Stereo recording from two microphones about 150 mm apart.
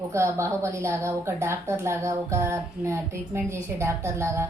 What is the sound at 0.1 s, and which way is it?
A woman's voice, 20° right (ahead or behind).